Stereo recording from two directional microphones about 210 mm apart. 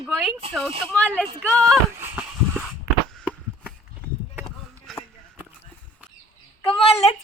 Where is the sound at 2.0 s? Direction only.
5° right (ahead or behind).